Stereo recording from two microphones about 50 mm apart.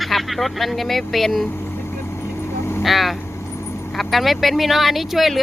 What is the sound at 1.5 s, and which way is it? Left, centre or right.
Vehicle, left.